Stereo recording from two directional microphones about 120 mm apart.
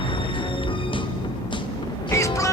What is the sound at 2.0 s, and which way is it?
Music, 25° left (ahead or behind).